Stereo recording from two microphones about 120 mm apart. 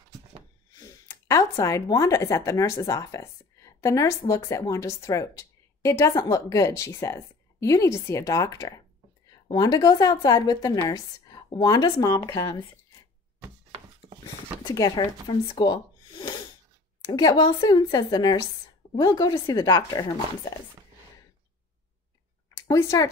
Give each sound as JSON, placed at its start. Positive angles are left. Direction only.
{"t": 0.7, "sound": "a woman's voice", "side_deg": 30}
{"t": 14.6, "sound": "speech", "side_deg": 40}
{"t": 22.7, "sound": "a woman's voice", "side_deg": 25}